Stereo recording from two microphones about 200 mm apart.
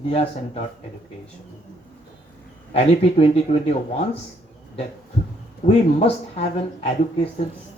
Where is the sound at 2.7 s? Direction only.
30° left (ahead or behind).